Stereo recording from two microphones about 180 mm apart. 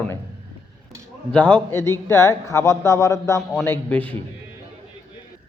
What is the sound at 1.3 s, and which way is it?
A man's voice, 5° left (ahead or behind).